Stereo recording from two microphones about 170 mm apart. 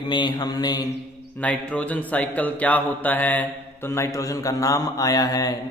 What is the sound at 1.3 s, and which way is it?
Speech, 10° left (ahead or behind).